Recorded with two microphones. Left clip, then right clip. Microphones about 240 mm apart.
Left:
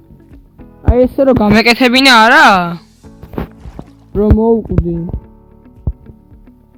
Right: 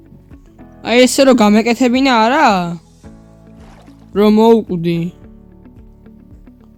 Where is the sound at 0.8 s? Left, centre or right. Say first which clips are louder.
Right 1 dB; right.